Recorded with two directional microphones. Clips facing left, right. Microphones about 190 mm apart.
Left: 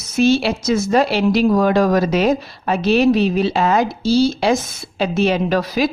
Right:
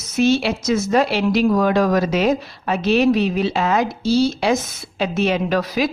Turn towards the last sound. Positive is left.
turn(degrees=35)  # may be behind; listen again after turning